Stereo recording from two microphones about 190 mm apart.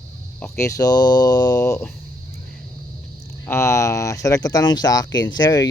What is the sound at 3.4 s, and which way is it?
Speech, 15° left (ahead or behind).